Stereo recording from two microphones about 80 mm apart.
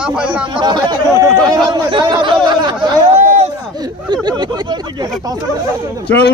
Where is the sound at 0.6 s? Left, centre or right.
Right.